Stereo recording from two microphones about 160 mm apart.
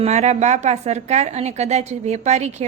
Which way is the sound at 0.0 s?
45° right (ahead or behind).